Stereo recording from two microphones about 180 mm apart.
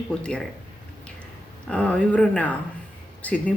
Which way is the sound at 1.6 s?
5° left (ahead or behind).